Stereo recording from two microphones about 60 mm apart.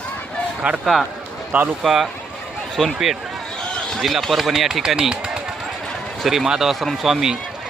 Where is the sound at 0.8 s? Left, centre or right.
Centre.